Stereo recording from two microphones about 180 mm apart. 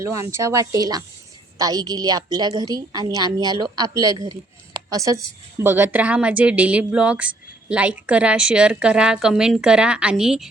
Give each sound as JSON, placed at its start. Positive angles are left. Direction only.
{"t": 0.0, "sound": "a woman's voice", "side_deg": -15}